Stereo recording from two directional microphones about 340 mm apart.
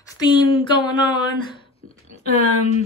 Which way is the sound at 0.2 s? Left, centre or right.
Centre.